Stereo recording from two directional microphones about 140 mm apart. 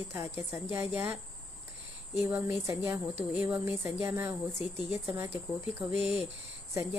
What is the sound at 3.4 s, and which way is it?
Speech, 10° right (ahead or behind).